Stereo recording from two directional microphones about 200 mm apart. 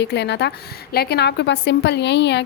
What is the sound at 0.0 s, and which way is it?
A woman's voice, 60° left (ahead or behind).